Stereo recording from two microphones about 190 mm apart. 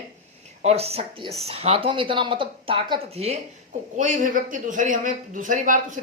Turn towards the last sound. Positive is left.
turn(degrees=-40)  # may be behind; listen again after turning